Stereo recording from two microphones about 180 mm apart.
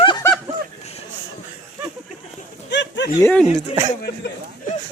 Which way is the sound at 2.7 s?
75° left (ahead or behind).